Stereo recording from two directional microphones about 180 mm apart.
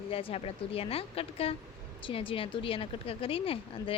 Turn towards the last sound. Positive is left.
turn(degrees=30)  # may be behind; listen again after turning